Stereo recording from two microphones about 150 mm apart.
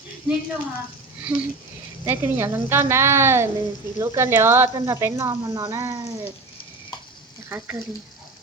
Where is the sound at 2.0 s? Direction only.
15° right (ahead or behind).